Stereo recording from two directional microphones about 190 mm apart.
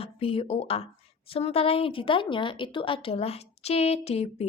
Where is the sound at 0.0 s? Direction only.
30° left (ahead or behind).